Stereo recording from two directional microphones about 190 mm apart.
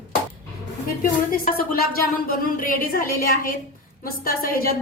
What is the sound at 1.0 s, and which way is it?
Speech, 50° left (ahead or behind).